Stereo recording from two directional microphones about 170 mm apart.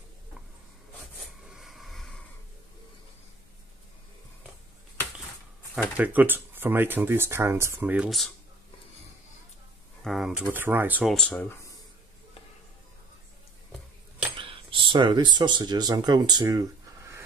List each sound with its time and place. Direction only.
1.4 s a sound: 5° right (ahead or behind)
5.9 s speech: 10° right (ahead or behind)
10.0 s speech: centre (ahead or behind)
11.1 s speech: 5° left (ahead or behind)
14.4 s speech: 30° right (ahead or behind)